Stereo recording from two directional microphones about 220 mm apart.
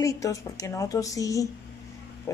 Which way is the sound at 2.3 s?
10° left (ahead or behind).